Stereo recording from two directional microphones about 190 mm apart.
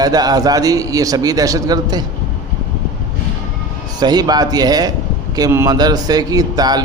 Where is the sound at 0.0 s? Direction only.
20° right (ahead or behind).